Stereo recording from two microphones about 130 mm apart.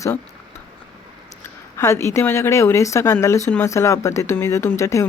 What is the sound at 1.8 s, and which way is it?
A woman's voice, 20° left (ahead or behind).